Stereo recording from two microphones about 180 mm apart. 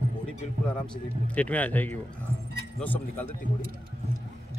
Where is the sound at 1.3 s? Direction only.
10° left (ahead or behind).